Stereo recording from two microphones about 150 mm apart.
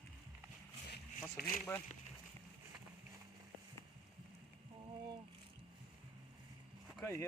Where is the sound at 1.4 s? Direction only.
85° left.